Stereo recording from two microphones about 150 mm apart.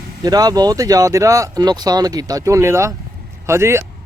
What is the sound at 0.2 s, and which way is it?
A man's voice, 25° right (ahead or behind).